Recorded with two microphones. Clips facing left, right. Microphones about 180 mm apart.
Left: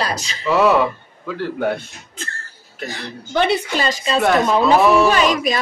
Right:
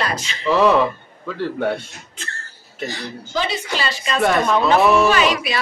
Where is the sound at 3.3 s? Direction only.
60° left (ahead or behind).